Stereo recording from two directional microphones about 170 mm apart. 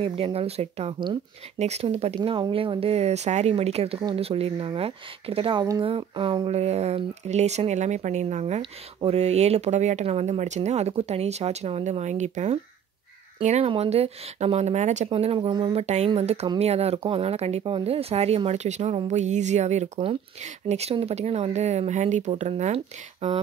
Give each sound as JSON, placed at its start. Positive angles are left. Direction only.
{"t": 0.0, "sound": "speech", "side_deg": -35}